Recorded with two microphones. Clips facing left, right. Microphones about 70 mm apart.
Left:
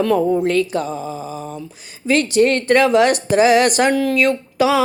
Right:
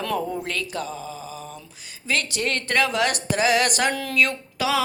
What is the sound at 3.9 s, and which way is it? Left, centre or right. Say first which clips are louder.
Speech: left 11 dB; centre.